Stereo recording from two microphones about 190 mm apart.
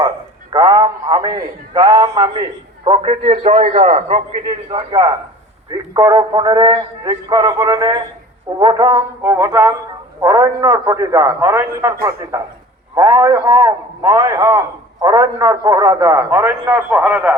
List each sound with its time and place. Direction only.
0.5 s a man's voice: 20° right (ahead or behind); by 4.2 s 35° right (ahead or behind)
4.4 s a man's voice: 25° right (ahead or behind); by 17.3 s 10° right (ahead or behind)